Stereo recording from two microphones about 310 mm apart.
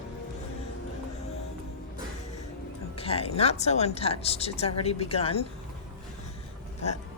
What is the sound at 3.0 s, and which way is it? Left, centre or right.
Speech, centre.